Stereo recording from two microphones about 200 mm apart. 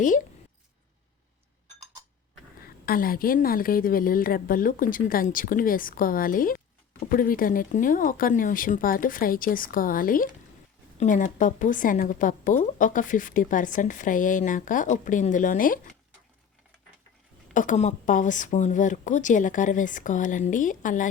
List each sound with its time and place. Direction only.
2.6 s a woman's voice: 45° left (ahead or behind)
17.5 s a woman's voice: 40° left (ahead or behind)